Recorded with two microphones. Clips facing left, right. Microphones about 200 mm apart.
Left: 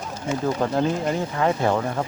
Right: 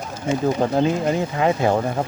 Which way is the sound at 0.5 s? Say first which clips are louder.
Right 3 dB; 15° right (ahead or behind).